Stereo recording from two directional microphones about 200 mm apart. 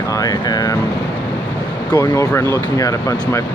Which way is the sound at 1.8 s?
20° left (ahead or behind).